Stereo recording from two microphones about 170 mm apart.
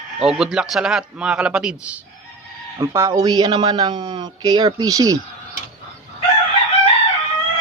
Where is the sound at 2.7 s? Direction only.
15° right (ahead or behind).